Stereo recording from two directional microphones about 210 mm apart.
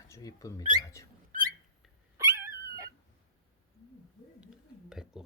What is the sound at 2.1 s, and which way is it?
Dog, 15° right (ahead or behind).